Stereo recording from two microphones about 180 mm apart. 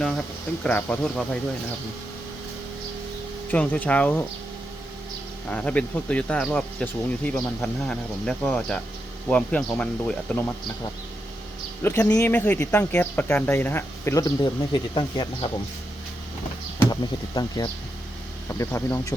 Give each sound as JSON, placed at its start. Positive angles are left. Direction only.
{"t": 0.6, "sound": "speech", "side_deg": 10}
{"t": 3.5, "sound": "speech", "side_deg": 10}
{"t": 5.5, "sound": "speech", "side_deg": 5}
{"t": 11.8, "sound": "speech", "side_deg": 15}
{"t": 16.8, "sound": "speech", "side_deg": 20}